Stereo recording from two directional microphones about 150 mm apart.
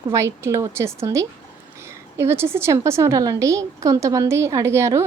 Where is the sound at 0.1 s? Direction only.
20° right (ahead or behind).